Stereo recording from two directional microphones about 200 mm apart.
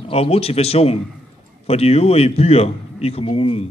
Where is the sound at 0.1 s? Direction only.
30° left (ahead or behind).